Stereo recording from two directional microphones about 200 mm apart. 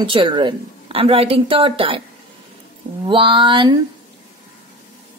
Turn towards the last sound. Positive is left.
turn(degrees=-25)  # may be behind; listen again after turning